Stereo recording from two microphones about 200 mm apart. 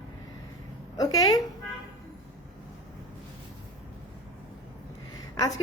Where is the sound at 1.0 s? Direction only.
20° left (ahead or behind).